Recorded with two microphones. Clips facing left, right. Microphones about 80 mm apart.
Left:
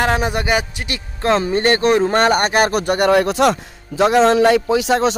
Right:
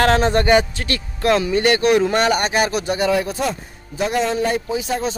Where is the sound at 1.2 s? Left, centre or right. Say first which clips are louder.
Left 1 dB; left.